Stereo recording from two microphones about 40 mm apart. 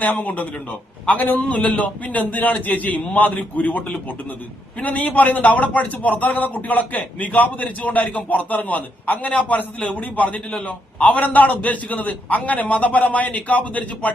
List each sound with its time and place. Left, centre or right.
0.0 s a man's voice: left
1.4 s a man's voice: left